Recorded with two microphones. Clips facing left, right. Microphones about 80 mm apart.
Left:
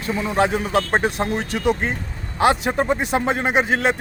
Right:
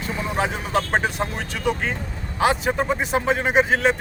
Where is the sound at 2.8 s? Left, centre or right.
Left.